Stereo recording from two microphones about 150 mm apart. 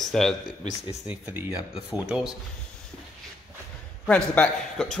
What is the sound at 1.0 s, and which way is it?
A man's voice, 10° right (ahead or behind).